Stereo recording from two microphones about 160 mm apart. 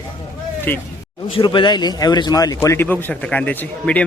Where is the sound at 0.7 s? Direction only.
10° left (ahead or behind).